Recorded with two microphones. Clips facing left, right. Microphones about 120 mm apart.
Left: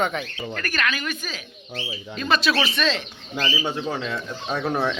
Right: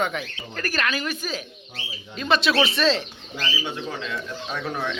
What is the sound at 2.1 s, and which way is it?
Speech, 25° right (ahead or behind).